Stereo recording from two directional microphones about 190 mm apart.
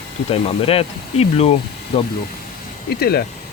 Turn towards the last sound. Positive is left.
turn(degrees=55)  # may be behind; listen again after turning